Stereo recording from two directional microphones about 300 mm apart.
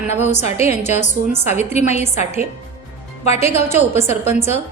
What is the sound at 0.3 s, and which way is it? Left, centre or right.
A woman's voice, left.